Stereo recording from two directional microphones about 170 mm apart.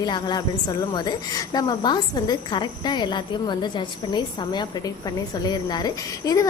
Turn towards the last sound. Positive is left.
turn(degrees=20)  # may be behind; listen again after turning